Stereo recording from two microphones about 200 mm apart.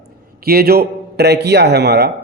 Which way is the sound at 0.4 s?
50° right (ahead or behind).